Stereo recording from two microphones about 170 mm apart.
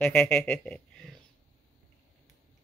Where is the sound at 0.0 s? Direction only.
10° left (ahead or behind).